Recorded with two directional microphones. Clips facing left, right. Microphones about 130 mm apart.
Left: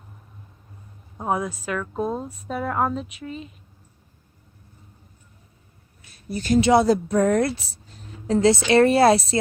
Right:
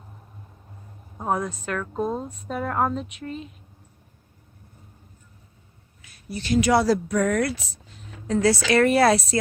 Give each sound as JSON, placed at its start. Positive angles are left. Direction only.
{"t": 1.2, "sound": "a woman's voice", "side_deg": 5}
{"t": 6.2, "sound": "speech", "side_deg": 45}
{"t": 6.6, "sound": "speech", "side_deg": 20}